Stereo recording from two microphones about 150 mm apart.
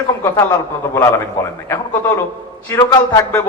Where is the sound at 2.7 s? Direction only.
20° left (ahead or behind).